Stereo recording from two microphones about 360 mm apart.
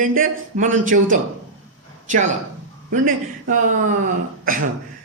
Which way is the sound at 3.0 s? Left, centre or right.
Right.